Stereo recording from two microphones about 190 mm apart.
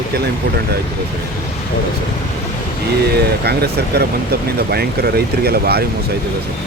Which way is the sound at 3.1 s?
60° right (ahead or behind).